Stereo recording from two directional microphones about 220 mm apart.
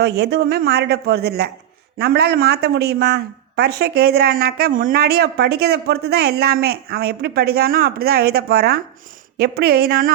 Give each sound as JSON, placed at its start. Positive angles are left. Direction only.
{"t": 0.2, "sound": "speech", "side_deg": -45}